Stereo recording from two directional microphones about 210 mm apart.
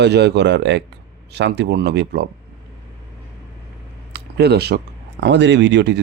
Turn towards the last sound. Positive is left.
turn(degrees=-55)  # may be behind; listen again after turning